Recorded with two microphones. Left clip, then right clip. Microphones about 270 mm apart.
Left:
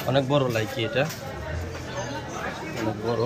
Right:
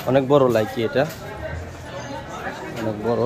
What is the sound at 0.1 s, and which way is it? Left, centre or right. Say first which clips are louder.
Speech: right 7 dB; centre.